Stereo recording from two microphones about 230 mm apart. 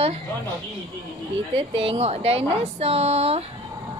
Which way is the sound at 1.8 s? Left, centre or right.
Right.